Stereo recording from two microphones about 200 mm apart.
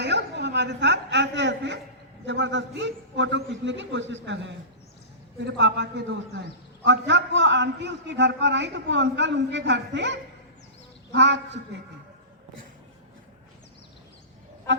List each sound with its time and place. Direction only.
0.0 s a man's voice: 60° right (ahead or behind)